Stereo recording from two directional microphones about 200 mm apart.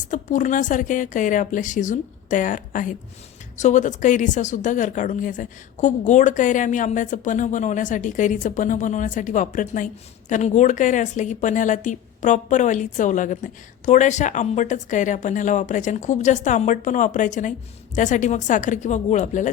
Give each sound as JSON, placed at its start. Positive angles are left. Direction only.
{"t": 0.1, "sound": "a woman's voice", "side_deg": 40}